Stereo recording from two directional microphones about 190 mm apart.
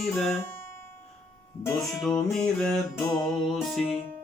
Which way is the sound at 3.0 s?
15° left (ahead or behind).